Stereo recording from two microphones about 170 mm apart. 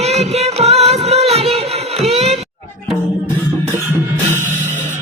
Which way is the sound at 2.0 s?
40° right (ahead or behind).